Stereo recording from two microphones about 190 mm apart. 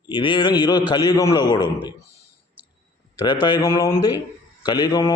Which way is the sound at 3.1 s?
25° left (ahead or behind).